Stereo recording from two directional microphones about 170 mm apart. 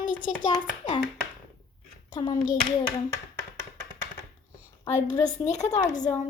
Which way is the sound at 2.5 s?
20° left (ahead or behind).